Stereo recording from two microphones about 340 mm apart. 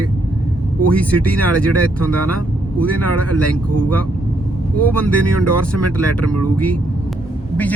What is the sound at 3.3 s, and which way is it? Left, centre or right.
Speech, right.